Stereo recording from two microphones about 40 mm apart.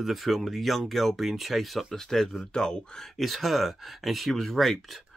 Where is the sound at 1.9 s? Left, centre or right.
Centre.